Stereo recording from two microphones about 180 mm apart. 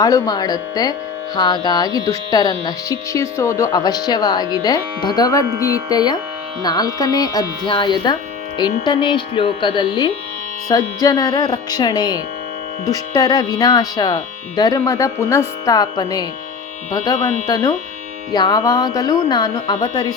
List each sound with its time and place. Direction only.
0.0 s speech: 20° left (ahead or behind)
18.3 s speech: 20° left (ahead or behind)